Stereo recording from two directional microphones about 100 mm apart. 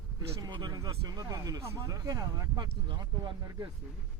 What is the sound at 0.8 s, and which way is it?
Speech, 40° right (ahead or behind).